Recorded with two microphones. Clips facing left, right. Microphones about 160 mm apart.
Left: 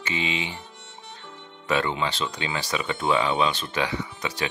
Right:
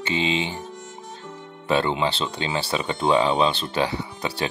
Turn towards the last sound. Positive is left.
turn(degrees=-35)  # may be behind; listen again after turning